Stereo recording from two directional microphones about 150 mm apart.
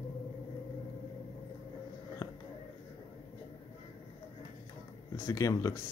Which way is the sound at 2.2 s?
25° left (ahead or behind).